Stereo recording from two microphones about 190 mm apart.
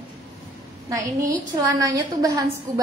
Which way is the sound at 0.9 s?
15° right (ahead or behind).